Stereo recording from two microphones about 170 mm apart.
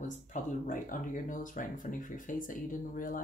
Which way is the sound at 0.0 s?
45° left (ahead or behind).